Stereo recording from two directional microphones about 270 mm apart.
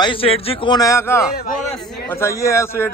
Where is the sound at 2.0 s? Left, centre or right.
Centre.